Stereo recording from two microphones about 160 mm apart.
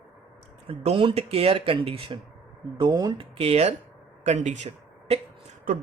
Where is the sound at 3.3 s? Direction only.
40° right (ahead or behind).